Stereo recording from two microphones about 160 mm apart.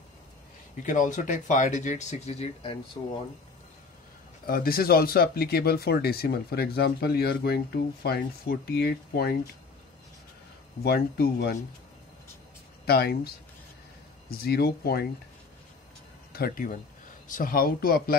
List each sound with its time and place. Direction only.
0.8 s speech: 50° left (ahead or behind); by 2.8 s 35° left (ahead or behind)
4.5 s speech: 65° left (ahead or behind)
10.8 s speech: 75° left (ahead or behind)
12.8 s speech: 80° left
14.3 s speech: 75° left (ahead or behind)
16.3 s speech: 65° left (ahead or behind)